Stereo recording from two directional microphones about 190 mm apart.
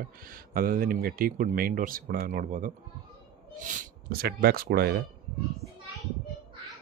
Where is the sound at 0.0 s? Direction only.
50° right (ahead or behind).